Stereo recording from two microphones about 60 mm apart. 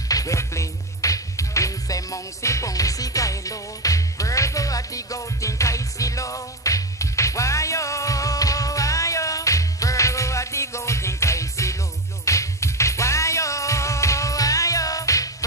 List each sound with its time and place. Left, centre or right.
0.1 s music: left